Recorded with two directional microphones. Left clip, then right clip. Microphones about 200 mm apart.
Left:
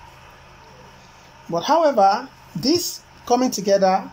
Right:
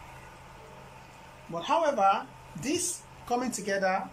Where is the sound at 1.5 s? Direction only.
30° left (ahead or behind).